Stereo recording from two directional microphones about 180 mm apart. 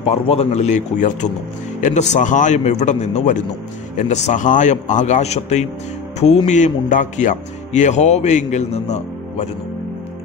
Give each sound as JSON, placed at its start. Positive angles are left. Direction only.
{"t": 0.0, "sound": "speech", "side_deg": 35}